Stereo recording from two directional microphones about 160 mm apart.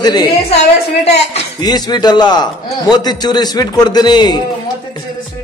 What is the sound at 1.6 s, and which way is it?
A man's voice, 25° left (ahead or behind).